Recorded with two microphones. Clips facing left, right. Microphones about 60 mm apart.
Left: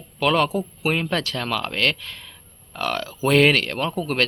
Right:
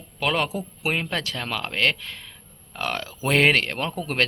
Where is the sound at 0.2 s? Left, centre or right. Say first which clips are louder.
Left 5 dB; centre.